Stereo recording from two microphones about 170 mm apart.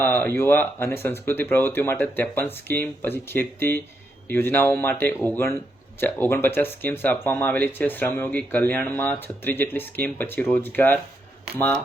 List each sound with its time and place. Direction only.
0.0 s speech: 10° left (ahead or behind)